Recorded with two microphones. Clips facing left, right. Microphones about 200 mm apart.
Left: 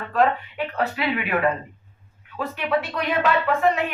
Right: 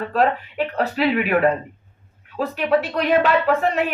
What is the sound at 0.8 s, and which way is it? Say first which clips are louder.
A woman's voice: right 5 dB; 35° right (ahead or behind).